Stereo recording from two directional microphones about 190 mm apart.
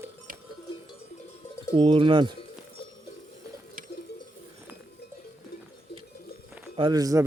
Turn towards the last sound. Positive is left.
turn(degrees=-20)  # may be behind; listen again after turning